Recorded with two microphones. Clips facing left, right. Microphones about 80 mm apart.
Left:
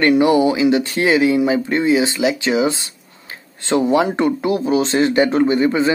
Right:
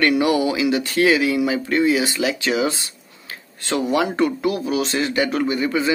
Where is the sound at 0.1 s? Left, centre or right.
Left.